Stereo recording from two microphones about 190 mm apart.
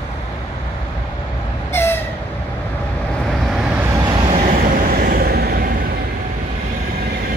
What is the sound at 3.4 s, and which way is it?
Vehicle, 5° right (ahead or behind).